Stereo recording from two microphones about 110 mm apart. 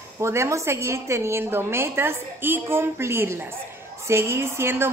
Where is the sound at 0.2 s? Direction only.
25° right (ahead or behind).